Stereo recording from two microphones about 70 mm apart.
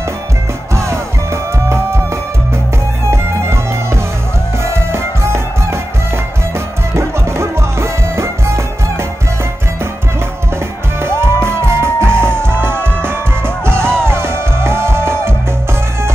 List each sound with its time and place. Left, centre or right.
0.7 s music: right
3.1 s music: right
7.0 s music: right
11.0 s music: right